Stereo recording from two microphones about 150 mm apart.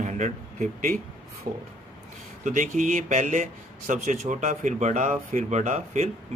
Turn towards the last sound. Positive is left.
turn(degrees=-55)  # may be behind; listen again after turning